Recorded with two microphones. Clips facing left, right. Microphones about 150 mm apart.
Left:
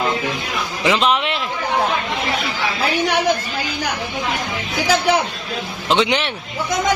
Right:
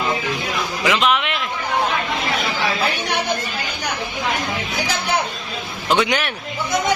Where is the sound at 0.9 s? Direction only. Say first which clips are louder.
Left 2 dB; 30° left (ahead or behind).